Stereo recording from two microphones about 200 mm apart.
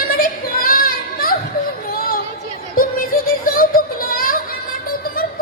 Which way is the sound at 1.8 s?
45° left (ahead or behind).